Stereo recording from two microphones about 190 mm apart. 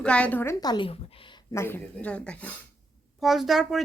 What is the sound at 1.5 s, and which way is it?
A woman's voice, 10° left (ahead or behind).